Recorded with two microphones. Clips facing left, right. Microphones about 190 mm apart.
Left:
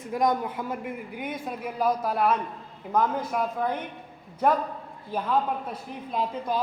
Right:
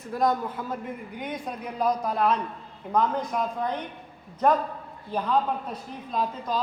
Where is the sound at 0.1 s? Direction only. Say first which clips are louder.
Even; 15° left (ahead or behind).